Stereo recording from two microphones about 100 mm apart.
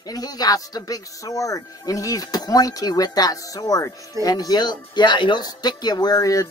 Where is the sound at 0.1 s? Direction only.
40° left (ahead or behind).